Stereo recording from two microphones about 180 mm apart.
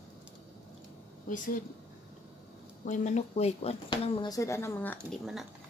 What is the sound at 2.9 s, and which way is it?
Speech, 40° left (ahead or behind).